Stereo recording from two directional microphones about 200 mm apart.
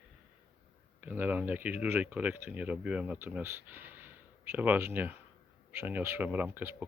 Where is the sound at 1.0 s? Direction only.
10° right (ahead or behind).